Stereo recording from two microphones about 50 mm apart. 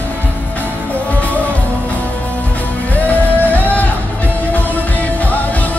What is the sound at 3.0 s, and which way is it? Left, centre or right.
Music, left.